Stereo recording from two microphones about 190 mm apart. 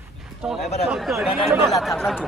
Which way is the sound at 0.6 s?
35° left (ahead or behind).